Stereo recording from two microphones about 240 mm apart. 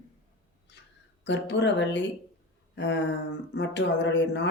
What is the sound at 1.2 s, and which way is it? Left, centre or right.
Speech, left.